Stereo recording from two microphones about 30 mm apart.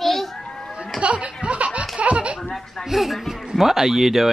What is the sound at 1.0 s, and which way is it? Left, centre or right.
Music, right.